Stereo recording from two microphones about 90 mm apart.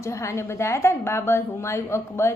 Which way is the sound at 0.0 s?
30° left (ahead or behind).